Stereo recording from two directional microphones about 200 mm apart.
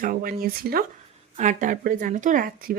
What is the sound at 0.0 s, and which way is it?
Speech, 45° right (ahead or behind).